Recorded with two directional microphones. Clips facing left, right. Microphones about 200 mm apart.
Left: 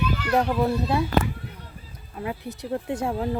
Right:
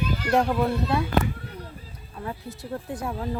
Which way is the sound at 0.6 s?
20° left (ahead or behind).